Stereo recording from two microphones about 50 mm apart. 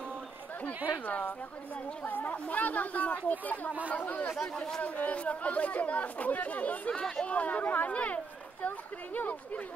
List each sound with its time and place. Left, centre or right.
1.0 s speech: left
4.6 s speech: centre
4.8 s speech: left
6.9 s speech: centre
7.2 s speech: left